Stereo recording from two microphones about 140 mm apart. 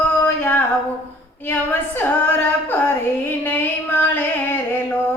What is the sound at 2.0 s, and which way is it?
Female singing, 10° left (ahead or behind).